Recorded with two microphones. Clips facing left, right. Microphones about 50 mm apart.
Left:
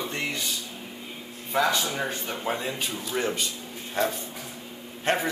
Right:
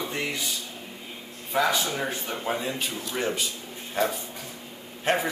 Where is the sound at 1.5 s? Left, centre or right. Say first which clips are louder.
Even; centre.